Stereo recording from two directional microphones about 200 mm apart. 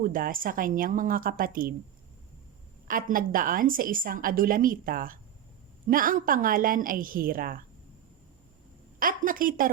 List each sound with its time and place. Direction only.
0.0 s a woman's voice: 45° right (ahead or behind)
2.8 s a woman's voice: 45° right (ahead or behind)
9.0 s a woman's voice: 45° right (ahead or behind)